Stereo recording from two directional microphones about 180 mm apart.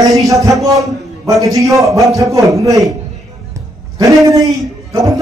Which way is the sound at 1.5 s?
15° right (ahead or behind).